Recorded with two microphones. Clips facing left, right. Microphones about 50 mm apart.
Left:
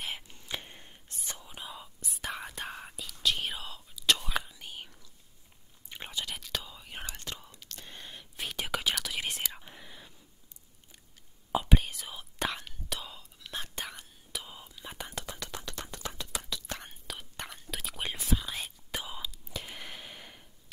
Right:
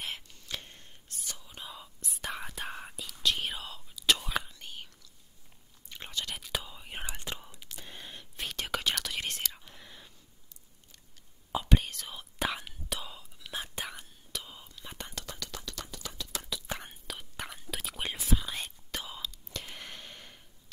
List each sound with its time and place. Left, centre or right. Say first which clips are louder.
0.3 s whispering: left 2 dB; left
1.5 s whispering: left 1 dB; centre
5.9 s chewing: even; centre
6.4 s whispering: right 1 dB; centre
7.8 s whispering: right 1 dB; centre
9.3 s whispering: left 1 dB; centre
9.8 s a sound: left 1 dB; centre
11.5 s whispering: left 1 dB; centre
14.3 s whispering: left 1 dB; centre
15.4 s a sound: left 1 dB; left
16.4 s whispering: right 1 dB; centre
18.9 s whispering: left 1 dB; centre